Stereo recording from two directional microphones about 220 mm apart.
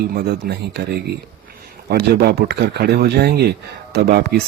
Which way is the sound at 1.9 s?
45° right (ahead or behind).